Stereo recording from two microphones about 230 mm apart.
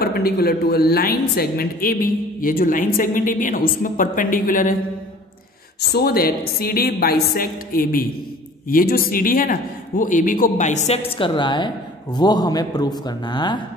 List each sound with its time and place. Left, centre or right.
0.0 s a woman's voice: left
5.8 s a woman's voice: left; by 13.6 s centre